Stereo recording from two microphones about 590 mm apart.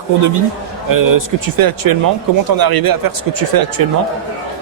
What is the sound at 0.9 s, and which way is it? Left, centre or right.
Speech, right.